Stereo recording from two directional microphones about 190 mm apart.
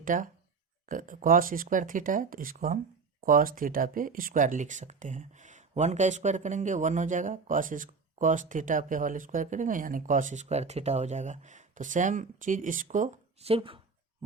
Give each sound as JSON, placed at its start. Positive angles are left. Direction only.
{"t": 0.0, "sound": "speech", "side_deg": -45}